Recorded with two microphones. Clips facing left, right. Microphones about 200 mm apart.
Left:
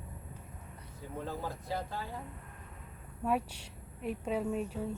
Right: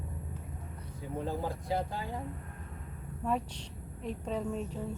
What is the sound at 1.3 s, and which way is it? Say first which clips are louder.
Speech: right 4 dB; 15° right (ahead or behind).